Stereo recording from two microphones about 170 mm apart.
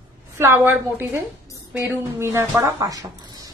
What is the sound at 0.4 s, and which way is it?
Speech, 15° right (ahead or behind).